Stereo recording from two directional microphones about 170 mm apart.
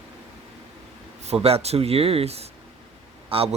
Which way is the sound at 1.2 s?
40° right (ahead or behind).